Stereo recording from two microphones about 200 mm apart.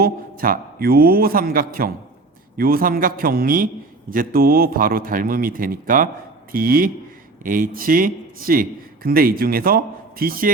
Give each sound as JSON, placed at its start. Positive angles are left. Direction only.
{"t": 0.0, "sound": "a man's voice", "side_deg": -45}